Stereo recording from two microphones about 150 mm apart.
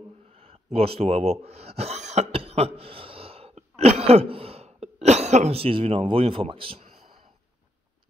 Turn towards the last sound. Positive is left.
turn(degrees=-40)  # may be behind; listen again after turning